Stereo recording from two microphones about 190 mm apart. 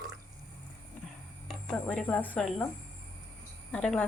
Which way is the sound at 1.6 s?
5° left (ahead or behind).